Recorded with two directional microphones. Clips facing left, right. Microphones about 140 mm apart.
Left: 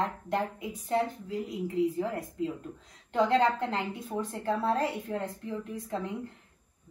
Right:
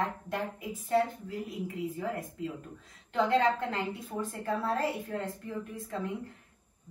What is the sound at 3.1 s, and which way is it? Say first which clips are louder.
A woman's voice: left 2 dB; 20° left (ahead or behind).